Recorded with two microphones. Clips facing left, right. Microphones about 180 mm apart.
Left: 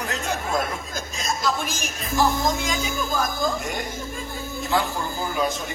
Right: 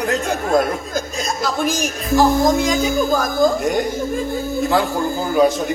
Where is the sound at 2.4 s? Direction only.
40° right (ahead or behind).